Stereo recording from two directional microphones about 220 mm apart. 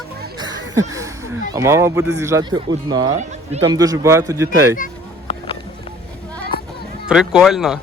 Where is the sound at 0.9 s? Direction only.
15° right (ahead or behind).